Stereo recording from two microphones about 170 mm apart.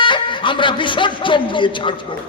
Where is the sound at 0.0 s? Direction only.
30° left (ahead or behind).